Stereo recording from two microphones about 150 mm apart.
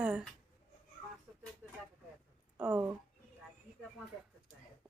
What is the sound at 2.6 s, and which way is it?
Speech, 10° right (ahead or behind).